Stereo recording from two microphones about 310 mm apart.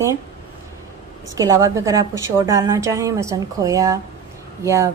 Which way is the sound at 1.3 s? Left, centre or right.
Centre.